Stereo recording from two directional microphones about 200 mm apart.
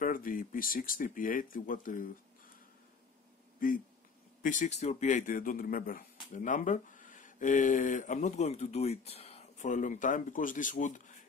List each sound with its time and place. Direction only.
0.0 s speech: 45° left (ahead or behind)
3.5 s speech: 45° left (ahead or behind)